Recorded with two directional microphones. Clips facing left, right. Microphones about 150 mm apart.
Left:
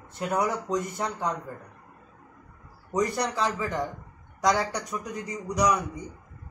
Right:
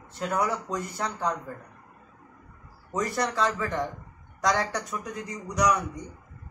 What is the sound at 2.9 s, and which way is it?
Speech, 10° left (ahead or behind).